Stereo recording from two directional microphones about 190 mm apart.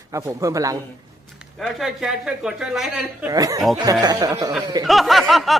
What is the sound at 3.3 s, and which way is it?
A man's voice, 20° right (ahead or behind).